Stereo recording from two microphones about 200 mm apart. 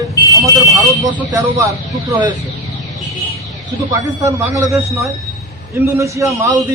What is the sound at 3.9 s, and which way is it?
Speech, 15° right (ahead or behind).